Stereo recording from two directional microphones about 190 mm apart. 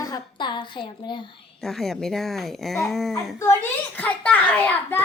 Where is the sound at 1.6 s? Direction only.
Centre (ahead or behind).